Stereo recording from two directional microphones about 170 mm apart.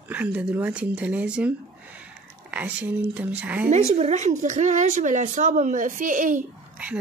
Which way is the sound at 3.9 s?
45° right (ahead or behind).